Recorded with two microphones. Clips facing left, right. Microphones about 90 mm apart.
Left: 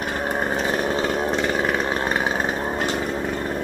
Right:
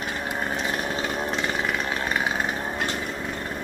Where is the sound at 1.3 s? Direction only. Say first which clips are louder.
Left 5 dB; 45° left (ahead or behind).